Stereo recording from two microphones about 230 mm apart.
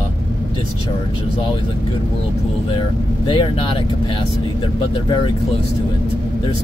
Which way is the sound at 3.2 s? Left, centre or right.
Left.